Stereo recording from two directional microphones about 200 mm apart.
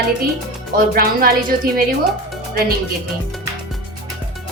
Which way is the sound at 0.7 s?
45° right (ahead or behind).